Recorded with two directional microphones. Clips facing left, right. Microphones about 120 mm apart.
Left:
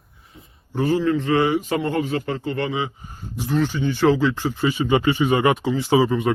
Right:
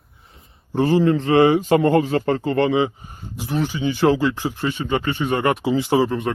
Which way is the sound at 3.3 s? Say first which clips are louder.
Left 2 dB; 10° right (ahead or behind).